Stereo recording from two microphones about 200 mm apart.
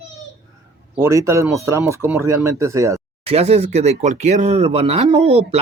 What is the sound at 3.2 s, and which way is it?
Speech, 30° right (ahead or behind).